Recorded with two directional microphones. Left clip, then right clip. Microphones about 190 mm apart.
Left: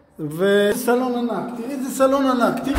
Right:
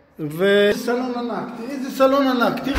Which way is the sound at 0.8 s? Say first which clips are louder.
Left 3 dB; 20° left (ahead or behind).